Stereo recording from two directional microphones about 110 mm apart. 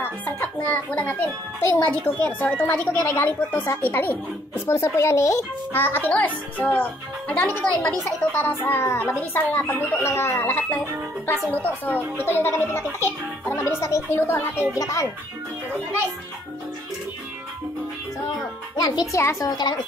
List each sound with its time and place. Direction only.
0.0 s a child's voice: 15° left (ahead or behind)
18.8 s a child's voice: 35° left (ahead or behind)